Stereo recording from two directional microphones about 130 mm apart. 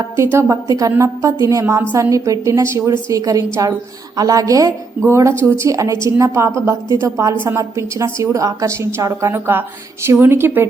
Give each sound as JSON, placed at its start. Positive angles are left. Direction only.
{"t": 0.2, "sound": "a woman's voice", "side_deg": -20}